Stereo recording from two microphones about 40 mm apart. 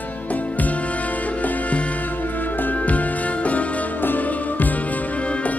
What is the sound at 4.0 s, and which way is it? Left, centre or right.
Music, left.